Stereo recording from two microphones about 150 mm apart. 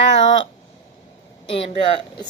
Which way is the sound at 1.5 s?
40° left (ahead or behind).